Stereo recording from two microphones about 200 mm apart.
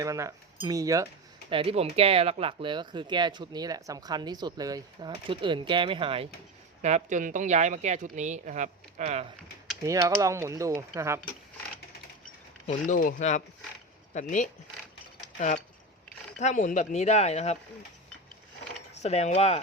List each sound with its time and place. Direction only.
0.0 s speech: 15° right (ahead or behind)
1.5 s speech: 25° right (ahead or behind)
6.8 s speech: 35° right (ahead or behind)
9.8 s speech: 15° right (ahead or behind)
12.6 s speech: 40° left (ahead or behind)
18.9 s speech: 30° left (ahead or behind)